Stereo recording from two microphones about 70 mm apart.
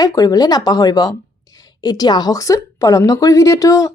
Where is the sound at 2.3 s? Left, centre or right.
Left.